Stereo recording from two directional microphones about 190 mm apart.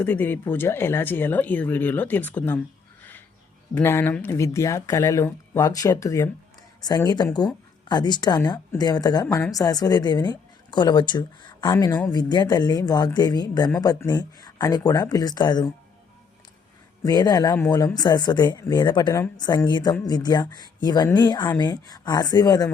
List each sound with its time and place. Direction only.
0.0 s speech: 10° left (ahead or behind)
3.8 s speech: 10° left (ahead or behind)
17.0 s speech: 20° left (ahead or behind)